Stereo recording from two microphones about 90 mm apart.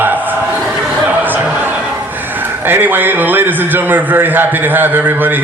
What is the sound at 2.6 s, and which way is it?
A man's voice, 25° right (ahead or behind).